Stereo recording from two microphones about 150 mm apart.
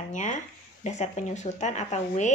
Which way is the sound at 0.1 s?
55° left (ahead or behind).